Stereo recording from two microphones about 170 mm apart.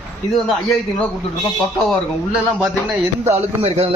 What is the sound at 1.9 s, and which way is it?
Speech, centre (ahead or behind).